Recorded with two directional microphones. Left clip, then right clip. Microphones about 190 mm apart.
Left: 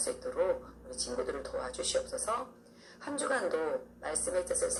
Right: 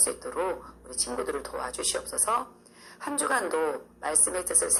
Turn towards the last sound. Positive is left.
turn(degrees=-40)  # may be behind; listen again after turning